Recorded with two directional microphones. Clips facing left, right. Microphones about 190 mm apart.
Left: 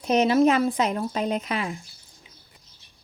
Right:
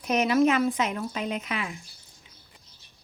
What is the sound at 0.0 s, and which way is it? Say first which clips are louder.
Speech: left 3 dB; 30° left (ahead or behind).